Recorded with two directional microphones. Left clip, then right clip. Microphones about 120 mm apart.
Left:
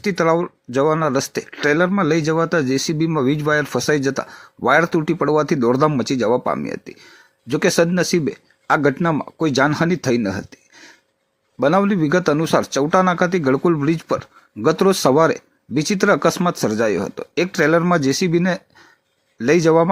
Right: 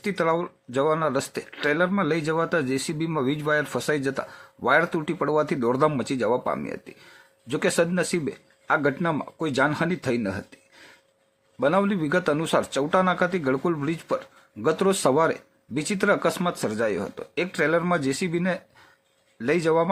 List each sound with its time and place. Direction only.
0.0 s a man's voice: 30° left (ahead or behind)